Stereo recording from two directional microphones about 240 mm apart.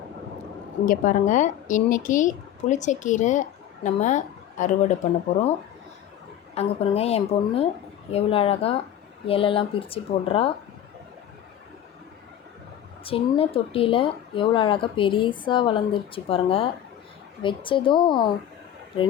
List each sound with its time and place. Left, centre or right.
0.9 s a woman's voice: left
6.5 s speech: left
13.1 s speech: left